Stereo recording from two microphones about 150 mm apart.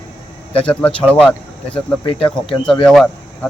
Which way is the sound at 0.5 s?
10° left (ahead or behind).